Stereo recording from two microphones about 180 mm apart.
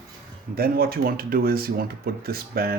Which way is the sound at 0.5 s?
55° right (ahead or behind).